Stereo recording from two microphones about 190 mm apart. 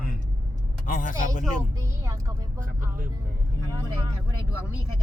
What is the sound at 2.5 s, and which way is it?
Speech, 45° right (ahead or behind).